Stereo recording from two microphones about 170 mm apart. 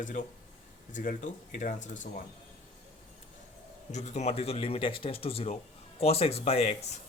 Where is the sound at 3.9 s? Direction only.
40° left (ahead or behind).